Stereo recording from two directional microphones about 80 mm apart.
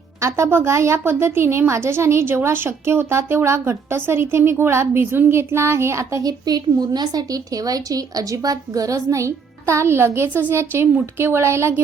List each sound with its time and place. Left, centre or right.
0.2 s a woman's voice: right
6.4 s a woman's voice: right